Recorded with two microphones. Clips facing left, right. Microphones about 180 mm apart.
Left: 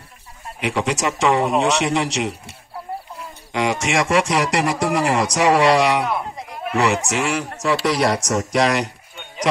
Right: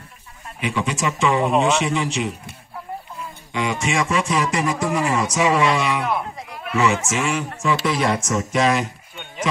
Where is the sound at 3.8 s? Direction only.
75° left (ahead or behind).